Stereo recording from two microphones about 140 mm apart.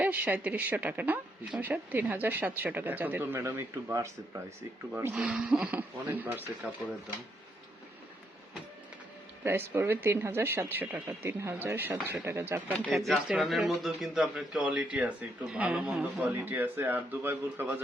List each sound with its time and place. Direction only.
0.0 s speech: 10° right (ahead or behind)
5.1 s speech: 5° right (ahead or behind)
9.4 s speech: 15° right (ahead or behind)
12.9 s speech: centre (ahead or behind)